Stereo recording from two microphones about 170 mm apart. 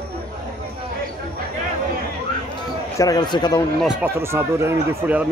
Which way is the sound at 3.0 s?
20° left (ahead or behind).